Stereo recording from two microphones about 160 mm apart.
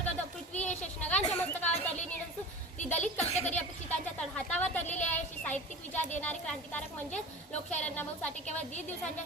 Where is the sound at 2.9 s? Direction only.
5° left (ahead or behind).